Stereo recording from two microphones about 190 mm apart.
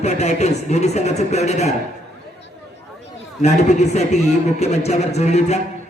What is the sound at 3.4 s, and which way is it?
A man's voice, 35° left (ahead or behind).